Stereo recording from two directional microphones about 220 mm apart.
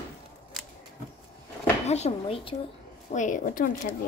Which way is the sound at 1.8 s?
30° left (ahead or behind).